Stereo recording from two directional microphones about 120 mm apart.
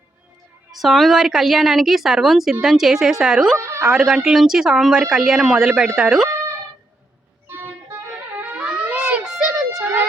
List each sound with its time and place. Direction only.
0.7 s a woman's voice: centre (ahead or behind)
3.6 s a sound: 25° right (ahead or behind)
3.8 s a woman's voice: 5° right (ahead or behind)
7.4 s music: 15° right (ahead or behind); by 9.8 s centre (ahead or behind)